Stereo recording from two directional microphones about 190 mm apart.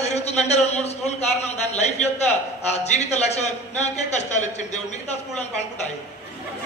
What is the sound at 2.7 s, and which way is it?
A man's voice, 35° left (ahead or behind).